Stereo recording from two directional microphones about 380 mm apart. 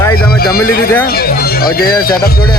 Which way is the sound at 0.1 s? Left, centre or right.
Left.